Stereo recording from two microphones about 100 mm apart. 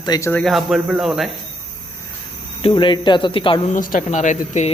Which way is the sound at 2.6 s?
55° left (ahead or behind).